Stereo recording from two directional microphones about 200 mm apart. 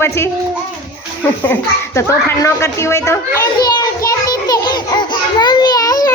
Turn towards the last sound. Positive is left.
turn(degrees=20)  # may be behind; listen again after turning